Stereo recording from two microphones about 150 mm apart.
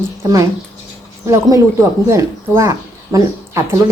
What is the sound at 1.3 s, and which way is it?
Speech, 20° right (ahead or behind).